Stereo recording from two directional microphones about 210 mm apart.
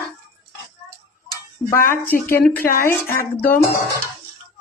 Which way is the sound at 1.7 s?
10° left (ahead or behind).